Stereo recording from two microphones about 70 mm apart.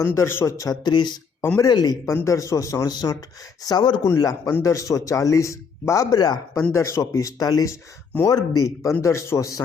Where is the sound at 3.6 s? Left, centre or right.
Left.